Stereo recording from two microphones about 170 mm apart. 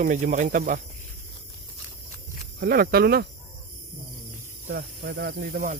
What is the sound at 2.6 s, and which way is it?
Speech, 65° right (ahead or behind).